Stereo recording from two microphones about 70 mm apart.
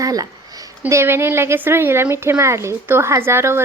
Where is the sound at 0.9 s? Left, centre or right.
Right.